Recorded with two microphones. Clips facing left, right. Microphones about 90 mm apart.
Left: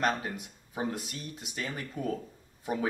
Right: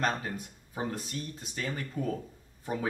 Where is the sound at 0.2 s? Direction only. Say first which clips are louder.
Even; 15° left (ahead or behind).